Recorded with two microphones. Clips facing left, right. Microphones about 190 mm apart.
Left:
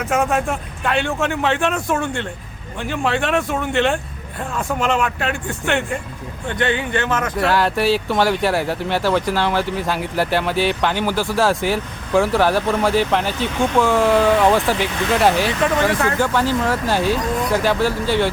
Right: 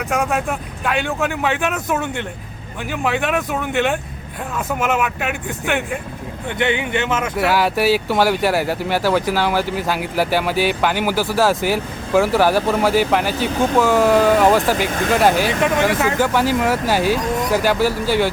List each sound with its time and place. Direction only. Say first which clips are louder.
0.0 s speech: left 1 dB; centre (ahead or behind)
14.8 s speech: right 2 dB; 50° right (ahead or behind)
15.1 s speech: right 1 dB; centre (ahead or behind)